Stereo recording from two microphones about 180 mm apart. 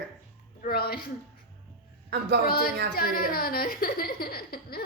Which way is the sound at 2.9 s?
55° left (ahead or behind).